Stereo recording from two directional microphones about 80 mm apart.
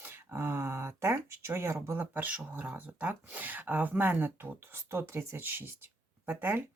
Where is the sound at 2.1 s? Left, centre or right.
Right.